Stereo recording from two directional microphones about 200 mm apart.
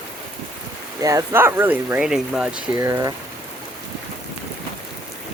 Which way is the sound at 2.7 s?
15° right (ahead or behind).